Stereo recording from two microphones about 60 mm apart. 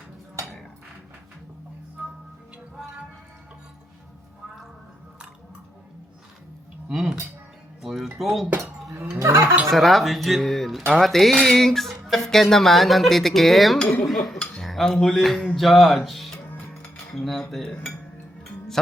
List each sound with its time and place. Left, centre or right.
6.9 s cutlery: centre
7.8 s speech: centre
8.6 s cowbell: right
9.1 s speech: right
9.7 s music: centre
14.1 s speech: centre
15.2 s music: centre
16.6 s music: centre
17.2 s music: centre
17.6 s speech: centre